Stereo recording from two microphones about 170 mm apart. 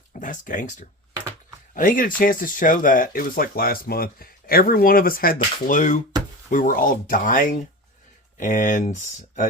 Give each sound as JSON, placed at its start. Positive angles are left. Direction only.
{"t": 0.2, "sound": "speech", "side_deg": 50}